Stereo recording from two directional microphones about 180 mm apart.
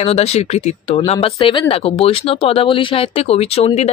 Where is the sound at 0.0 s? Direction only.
35° left (ahead or behind).